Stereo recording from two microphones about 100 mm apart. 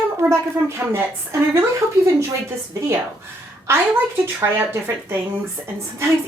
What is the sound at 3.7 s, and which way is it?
Speech, 25° right (ahead or behind).